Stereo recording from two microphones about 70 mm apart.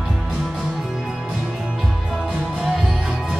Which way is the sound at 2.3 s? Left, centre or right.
Centre.